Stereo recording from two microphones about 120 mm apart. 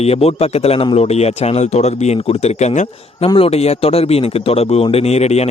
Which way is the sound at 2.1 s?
60° left (ahead or behind).